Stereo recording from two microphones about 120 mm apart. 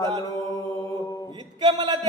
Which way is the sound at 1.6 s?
35° right (ahead or behind).